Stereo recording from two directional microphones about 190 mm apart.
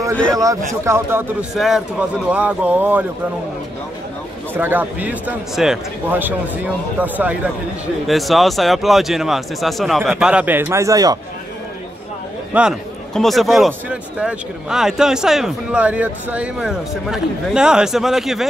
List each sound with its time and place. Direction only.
0.3 s a man's voice: 20° right (ahead or behind)
1.5 s a man's voice: centre (ahead or behind)
4.6 s a man's voice: 10° right (ahead or behind)
12.5 s a man's voice: centre (ahead or behind)